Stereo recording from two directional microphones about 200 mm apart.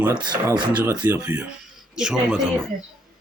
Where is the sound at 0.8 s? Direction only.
10° right (ahead or behind).